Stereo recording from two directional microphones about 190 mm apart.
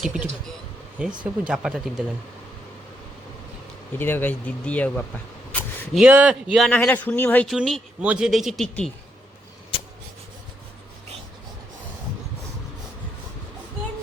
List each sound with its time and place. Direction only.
0.0 s speech: 5° right (ahead or behind)
3.9 s speech: 10° left (ahead or behind)
9.7 s writing: 25° left (ahead or behind)